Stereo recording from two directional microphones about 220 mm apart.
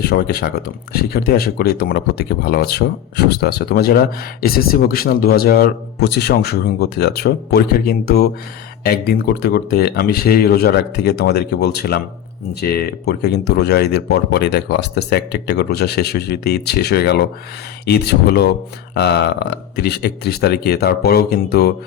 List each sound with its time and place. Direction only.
0.0 s speech: 45° left (ahead or behind)